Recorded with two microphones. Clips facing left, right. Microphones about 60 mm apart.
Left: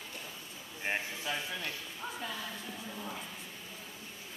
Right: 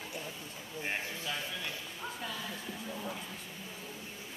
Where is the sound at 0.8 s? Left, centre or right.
Centre.